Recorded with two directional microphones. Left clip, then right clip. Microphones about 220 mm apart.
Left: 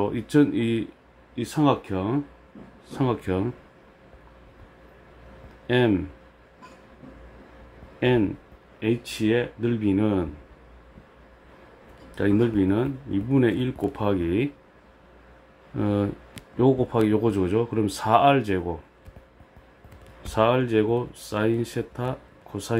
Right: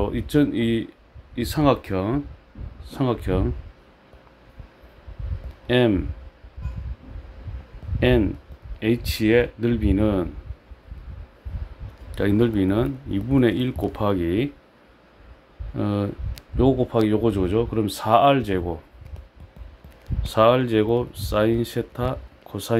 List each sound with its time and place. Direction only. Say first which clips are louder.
0.0 s speech: even; 20° right (ahead or behind)
5.7 s speech: right 2 dB; 20° right (ahead or behind)
8.0 s speech: right 2 dB; 25° right (ahead or behind)
12.2 s speech: right 1 dB; 25° right (ahead or behind)
15.7 s speech: even; 20° right (ahead or behind)
20.2 s speech: right 4 dB; 25° right (ahead or behind)